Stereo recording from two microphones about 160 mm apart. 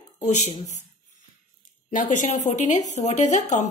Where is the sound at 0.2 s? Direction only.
50° left (ahead or behind).